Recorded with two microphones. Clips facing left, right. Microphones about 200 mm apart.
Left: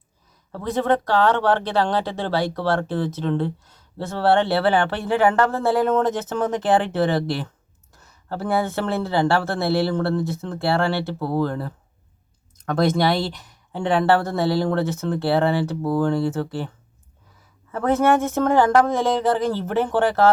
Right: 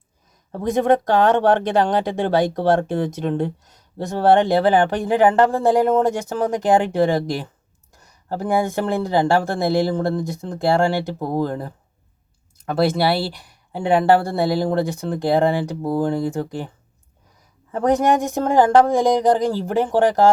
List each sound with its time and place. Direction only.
0.5 s speech: 15° right (ahead or behind)